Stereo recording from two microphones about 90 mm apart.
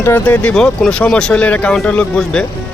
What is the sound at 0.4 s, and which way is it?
Speech, 5° left (ahead or behind).